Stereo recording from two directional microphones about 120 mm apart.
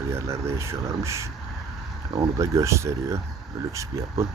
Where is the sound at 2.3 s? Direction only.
25° right (ahead or behind).